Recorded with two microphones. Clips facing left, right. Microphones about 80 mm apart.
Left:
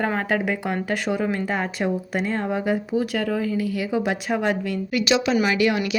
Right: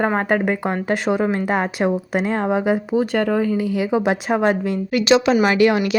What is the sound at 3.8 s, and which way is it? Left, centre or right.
A woman's voice, right.